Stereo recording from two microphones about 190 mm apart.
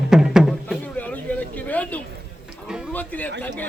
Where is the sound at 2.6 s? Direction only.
5° right (ahead or behind).